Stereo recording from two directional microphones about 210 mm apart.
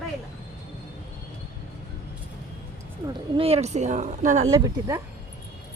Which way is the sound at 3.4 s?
30° right (ahead or behind).